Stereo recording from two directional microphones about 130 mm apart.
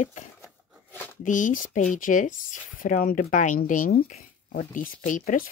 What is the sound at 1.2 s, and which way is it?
Speech, 80° left.